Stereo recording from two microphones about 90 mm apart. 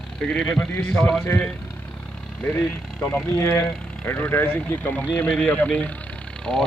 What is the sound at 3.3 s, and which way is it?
Speech, 25° left (ahead or behind).